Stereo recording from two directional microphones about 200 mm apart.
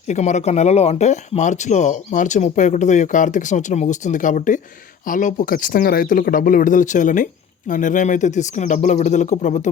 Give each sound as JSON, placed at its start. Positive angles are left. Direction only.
{"t": 0.1, "sound": "speech", "side_deg": 35}